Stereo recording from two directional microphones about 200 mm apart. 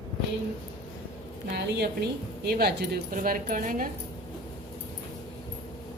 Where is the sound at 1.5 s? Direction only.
55° right (ahead or behind).